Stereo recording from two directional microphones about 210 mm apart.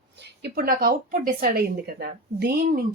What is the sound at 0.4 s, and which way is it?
Speech, 45° right (ahead or behind).